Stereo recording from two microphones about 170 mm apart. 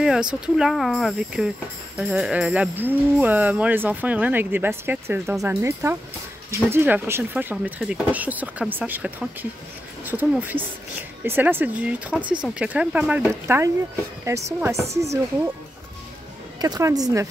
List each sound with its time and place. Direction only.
0.0 s speech: 5° right (ahead or behind)
16.6 s a woman's voice: 20° right (ahead or behind)